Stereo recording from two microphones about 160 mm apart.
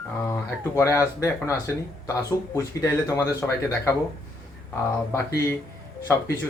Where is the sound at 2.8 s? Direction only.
20° left (ahead or behind).